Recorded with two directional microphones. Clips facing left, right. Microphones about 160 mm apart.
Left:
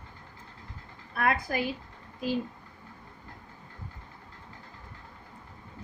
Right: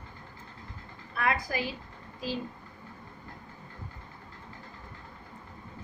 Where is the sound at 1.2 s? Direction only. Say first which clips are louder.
Left 2 dB; 55° left (ahead or behind).